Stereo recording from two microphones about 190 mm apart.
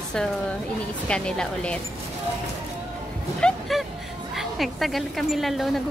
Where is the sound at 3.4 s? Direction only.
Centre (ahead or behind).